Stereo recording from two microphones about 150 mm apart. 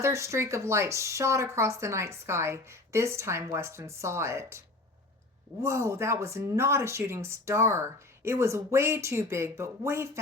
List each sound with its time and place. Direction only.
0.0 s speech: 20° right (ahead or behind)
5.6 s speech: 20° right (ahead or behind)